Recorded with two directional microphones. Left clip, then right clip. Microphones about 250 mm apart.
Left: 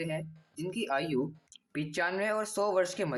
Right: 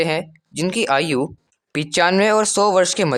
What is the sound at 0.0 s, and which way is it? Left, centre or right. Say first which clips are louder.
Speech: right 16 dB; right.